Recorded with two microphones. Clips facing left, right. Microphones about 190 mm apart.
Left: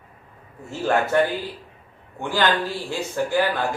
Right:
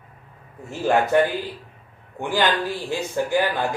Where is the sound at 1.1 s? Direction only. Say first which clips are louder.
Right 1 dB; 15° right (ahead or behind).